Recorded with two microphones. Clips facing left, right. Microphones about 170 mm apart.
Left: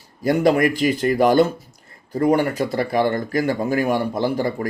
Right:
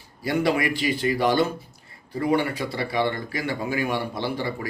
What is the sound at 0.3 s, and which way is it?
Speech, 45° left (ahead or behind).